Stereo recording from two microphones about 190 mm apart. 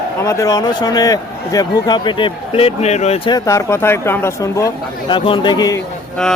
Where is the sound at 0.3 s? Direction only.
15° left (ahead or behind); by 3.2 s 35° left (ahead or behind).